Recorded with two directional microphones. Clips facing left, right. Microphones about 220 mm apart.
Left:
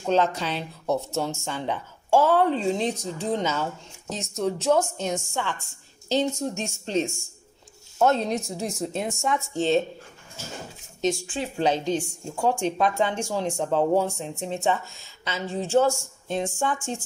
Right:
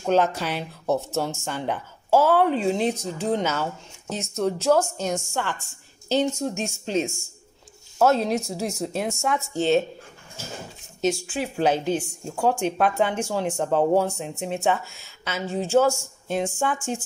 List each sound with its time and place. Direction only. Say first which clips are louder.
0.0 s speech: right 2 dB; 5° right (ahead or behind)
11.0 s a woman's voice: right 1 dB; centre (ahead or behind)